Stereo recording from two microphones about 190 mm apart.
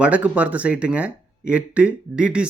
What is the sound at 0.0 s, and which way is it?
Speech, 5° right (ahead or behind).